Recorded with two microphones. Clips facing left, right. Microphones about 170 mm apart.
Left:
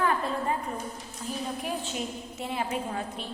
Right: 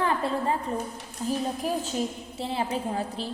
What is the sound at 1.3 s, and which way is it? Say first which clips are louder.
A woman's voice: right 5 dB; 40° right (ahead or behind).